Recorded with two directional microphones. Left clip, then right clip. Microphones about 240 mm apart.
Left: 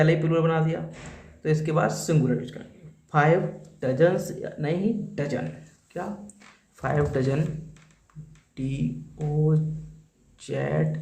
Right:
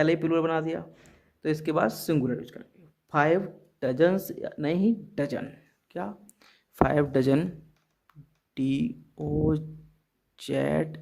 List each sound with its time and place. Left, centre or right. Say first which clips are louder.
0.0 s speech: left 2 dB; right
6.8 s speech: right 1 dB; right
8.5 s speech: right 3 dB; right